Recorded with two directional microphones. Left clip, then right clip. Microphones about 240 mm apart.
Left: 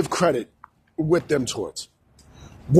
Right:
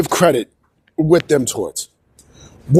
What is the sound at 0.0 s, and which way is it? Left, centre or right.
Speech, right.